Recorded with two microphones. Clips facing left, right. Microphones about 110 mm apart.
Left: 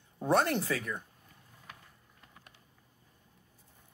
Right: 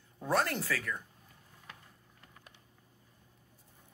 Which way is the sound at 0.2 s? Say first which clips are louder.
Left 4 dB; 25° left (ahead or behind).